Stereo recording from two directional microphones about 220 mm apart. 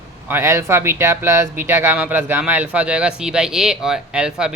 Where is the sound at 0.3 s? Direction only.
10° right (ahead or behind).